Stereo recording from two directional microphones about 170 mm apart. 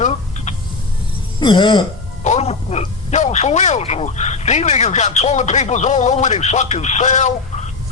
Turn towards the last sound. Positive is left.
turn(degrees=45)  # may be behind; listen again after turning